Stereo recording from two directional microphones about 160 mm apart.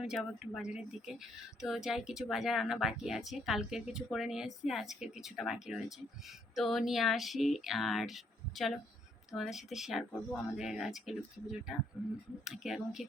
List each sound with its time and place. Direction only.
0.0 s speech: centre (ahead or behind)
12.5 s speech: centre (ahead or behind)